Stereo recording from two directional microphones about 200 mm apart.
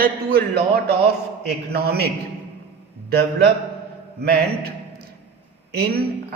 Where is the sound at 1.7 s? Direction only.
50° right (ahead or behind).